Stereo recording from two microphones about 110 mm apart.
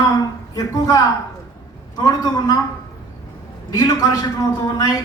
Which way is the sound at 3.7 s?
35° left (ahead or behind).